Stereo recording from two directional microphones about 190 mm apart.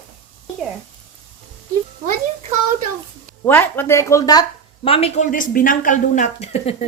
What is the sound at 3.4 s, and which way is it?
Speech, 10° left (ahead or behind).